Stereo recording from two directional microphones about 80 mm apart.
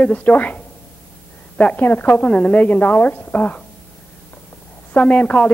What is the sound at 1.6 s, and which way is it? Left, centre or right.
A woman's voice, centre.